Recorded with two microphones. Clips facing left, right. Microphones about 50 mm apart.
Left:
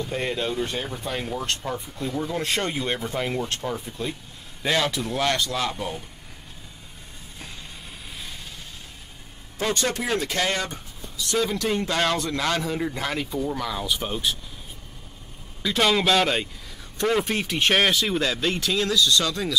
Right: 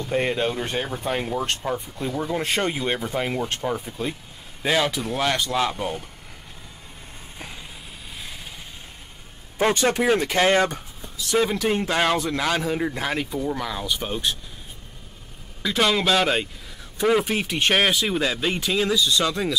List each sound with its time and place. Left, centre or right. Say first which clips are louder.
0.1 s speech: right 7 dB; centre
5.5 s speech: right 4 dB; centre
9.8 s speech: right 5 dB; right; by 14.4 s centre
15.6 s speech: even; centre